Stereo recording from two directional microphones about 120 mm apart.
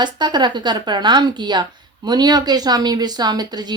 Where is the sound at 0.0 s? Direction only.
40° right (ahead or behind).